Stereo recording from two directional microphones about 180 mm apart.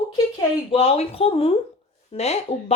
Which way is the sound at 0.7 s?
35° left (ahead or behind).